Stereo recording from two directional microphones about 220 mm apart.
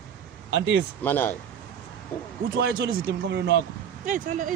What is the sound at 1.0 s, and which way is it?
Speech, 10° left (ahead or behind).